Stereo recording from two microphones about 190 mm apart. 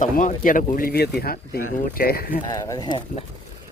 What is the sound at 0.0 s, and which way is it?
Speech, 45° left (ahead or behind).